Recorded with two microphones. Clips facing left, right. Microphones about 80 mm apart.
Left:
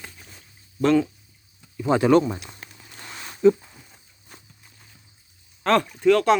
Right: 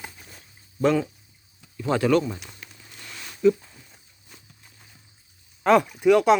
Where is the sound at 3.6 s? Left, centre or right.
Centre.